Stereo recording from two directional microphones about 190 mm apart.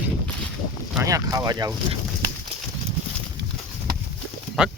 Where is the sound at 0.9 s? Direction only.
15° right (ahead or behind).